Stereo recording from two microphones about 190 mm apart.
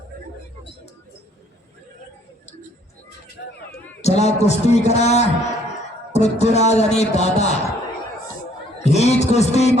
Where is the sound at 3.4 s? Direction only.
60° left (ahead or behind).